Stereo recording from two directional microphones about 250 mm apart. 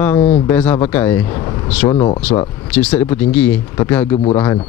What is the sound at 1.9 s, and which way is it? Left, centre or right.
Speech, centre.